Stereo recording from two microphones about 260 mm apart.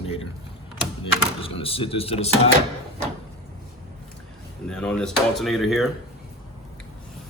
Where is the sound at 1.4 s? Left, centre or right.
Left.